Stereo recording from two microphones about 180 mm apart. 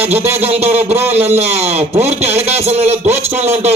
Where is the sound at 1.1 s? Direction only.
35° right (ahead or behind).